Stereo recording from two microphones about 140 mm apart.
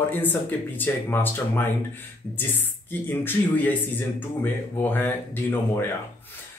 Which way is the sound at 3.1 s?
15° left (ahead or behind).